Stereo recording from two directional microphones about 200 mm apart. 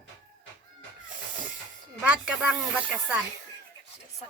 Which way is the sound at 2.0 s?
5° right (ahead or behind).